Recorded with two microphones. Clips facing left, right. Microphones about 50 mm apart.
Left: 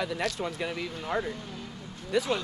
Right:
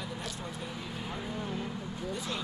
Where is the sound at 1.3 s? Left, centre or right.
Centre.